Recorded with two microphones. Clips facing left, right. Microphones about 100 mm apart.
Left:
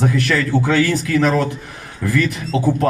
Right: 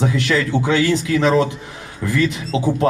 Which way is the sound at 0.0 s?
20° right (ahead or behind).